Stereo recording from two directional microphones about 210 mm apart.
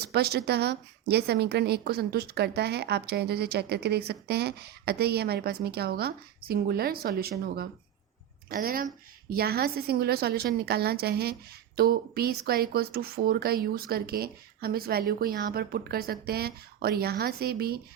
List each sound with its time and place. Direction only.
0.0 s speech: 50° right (ahead or behind)